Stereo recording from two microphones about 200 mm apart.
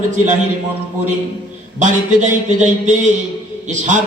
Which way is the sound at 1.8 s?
40° right (ahead or behind).